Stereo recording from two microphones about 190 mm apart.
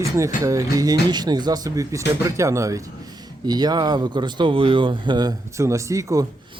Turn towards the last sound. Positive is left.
turn(degrees=-15)  # may be behind; listen again after turning